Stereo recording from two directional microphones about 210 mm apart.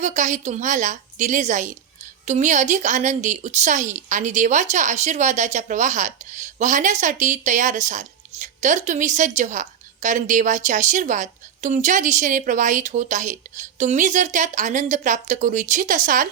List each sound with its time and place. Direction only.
0.0 s a woman's voice: 35° right (ahead or behind)